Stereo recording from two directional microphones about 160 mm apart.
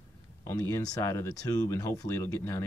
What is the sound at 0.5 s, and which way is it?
Speech, 20° left (ahead or behind).